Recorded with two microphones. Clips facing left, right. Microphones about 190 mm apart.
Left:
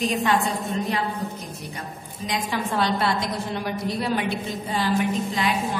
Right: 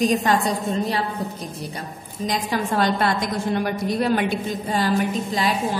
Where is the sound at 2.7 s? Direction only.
50° right (ahead or behind).